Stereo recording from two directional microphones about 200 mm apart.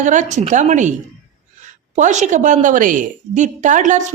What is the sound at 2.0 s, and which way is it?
A woman's voice, 35° right (ahead or behind).